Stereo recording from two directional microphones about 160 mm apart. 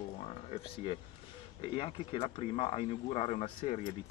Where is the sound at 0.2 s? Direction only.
40° left (ahead or behind).